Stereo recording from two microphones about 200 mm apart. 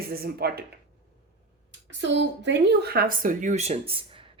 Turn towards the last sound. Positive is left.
turn(degrees=-30)  # may be behind; listen again after turning